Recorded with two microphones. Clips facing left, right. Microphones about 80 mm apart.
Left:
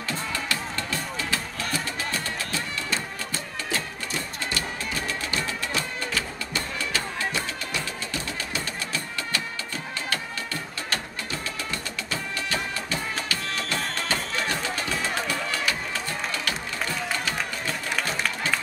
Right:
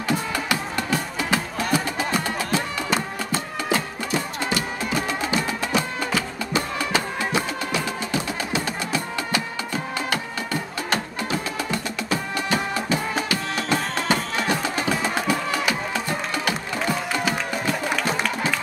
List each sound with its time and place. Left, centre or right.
0.1 s music: centre
3.6 s music: centre